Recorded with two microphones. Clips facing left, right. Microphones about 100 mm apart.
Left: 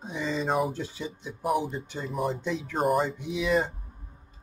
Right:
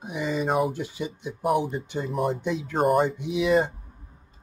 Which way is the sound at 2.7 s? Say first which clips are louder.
Right 3 dB; centre (ahead or behind).